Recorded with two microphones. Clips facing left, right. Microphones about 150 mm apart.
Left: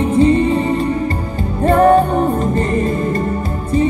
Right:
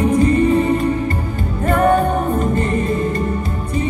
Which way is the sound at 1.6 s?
35° left (ahead or behind).